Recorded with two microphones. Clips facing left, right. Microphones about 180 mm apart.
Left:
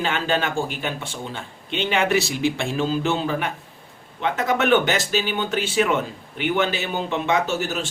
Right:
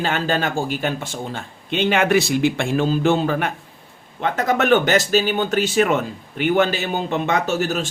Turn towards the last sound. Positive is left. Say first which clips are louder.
# right 2 dB
turn(degrees=-45)  # may be behind; listen again after turning